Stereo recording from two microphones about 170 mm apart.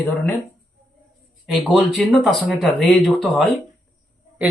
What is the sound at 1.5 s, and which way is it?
Speech, centre (ahead or behind).